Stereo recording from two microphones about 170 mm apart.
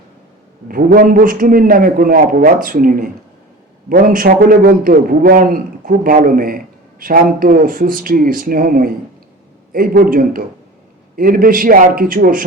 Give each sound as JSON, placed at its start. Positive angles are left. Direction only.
{"t": 0.7, "sound": "a man's voice", "side_deg": -60}